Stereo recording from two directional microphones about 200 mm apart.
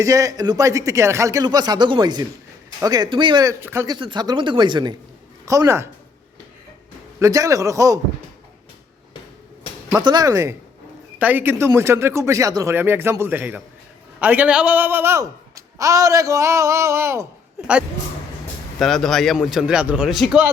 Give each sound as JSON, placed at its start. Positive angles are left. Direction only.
{"t": 0.0, "sound": "speech", "side_deg": -15}
{"t": 7.2, "sound": "speech", "side_deg": -15}
{"t": 9.9, "sound": "speech", "side_deg": -20}
{"t": 18.8, "sound": "speech", "side_deg": 0}